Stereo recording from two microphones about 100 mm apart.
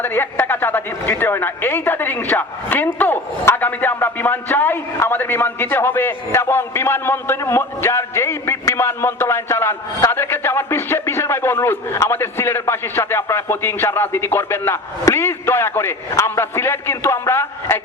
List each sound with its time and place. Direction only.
0.0 s a woman's voice: 20° left (ahead or behind)